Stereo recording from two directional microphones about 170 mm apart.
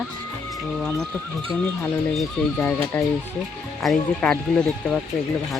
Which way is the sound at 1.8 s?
10° left (ahead or behind).